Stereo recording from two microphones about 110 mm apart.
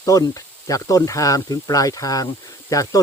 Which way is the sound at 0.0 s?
30° left (ahead or behind).